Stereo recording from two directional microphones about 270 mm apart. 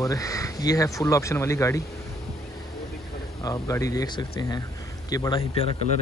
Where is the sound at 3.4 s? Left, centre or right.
Centre.